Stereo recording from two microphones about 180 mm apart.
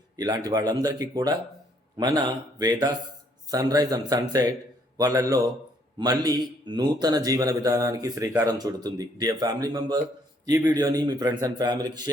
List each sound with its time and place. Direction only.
0.2 s a man's voice: 20° right (ahead or behind)